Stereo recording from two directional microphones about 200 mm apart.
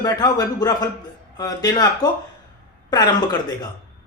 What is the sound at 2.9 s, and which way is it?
Speech, 20° left (ahead or behind).